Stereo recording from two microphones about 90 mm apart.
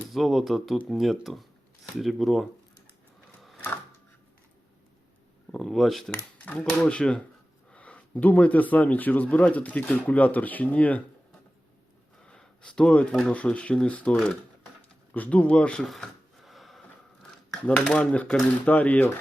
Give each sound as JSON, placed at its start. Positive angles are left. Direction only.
{"t": 0.1, "sound": "speech", "side_deg": 0}
{"t": 5.5, "sound": "speech", "side_deg": 0}
{"t": 6.4, "sound": "speech", "side_deg": 15}
{"t": 7.7, "sound": "a sound", "side_deg": 15}
{"t": 8.1, "sound": "speech", "side_deg": 20}
{"t": 12.2, "sound": "speech", "side_deg": 10}
{"t": 15.1, "sound": "a sound", "side_deg": 15}
{"t": 17.7, "sound": "speech", "side_deg": 10}